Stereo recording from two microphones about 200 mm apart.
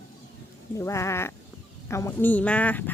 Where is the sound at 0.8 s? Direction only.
15° left (ahead or behind).